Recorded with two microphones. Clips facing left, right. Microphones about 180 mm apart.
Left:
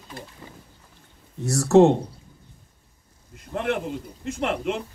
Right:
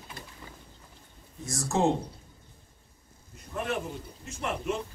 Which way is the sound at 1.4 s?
70° left (ahead or behind).